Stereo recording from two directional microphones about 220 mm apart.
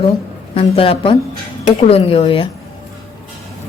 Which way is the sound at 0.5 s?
25° left (ahead or behind).